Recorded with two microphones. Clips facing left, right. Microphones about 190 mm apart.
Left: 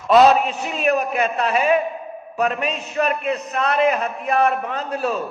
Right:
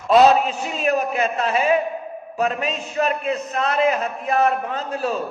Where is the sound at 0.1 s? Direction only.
30° right (ahead or behind).